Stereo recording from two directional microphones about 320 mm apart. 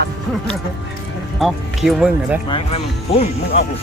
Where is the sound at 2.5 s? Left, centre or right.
Centre.